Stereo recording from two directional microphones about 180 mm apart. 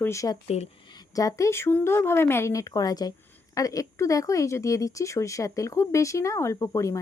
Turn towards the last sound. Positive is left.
turn(degrees=15)  # may be behind; listen again after turning